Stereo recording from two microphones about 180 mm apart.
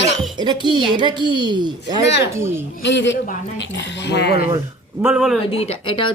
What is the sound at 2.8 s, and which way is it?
A man's voice, 85° left.